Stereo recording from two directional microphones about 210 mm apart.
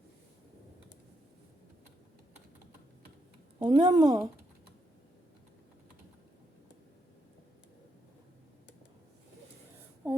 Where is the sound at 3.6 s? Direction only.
20° right (ahead or behind).